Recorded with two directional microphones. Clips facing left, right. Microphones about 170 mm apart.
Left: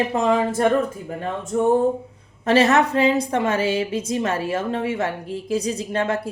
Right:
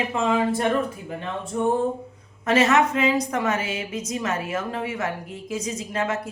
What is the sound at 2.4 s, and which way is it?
A woman's voice, 35° left (ahead or behind).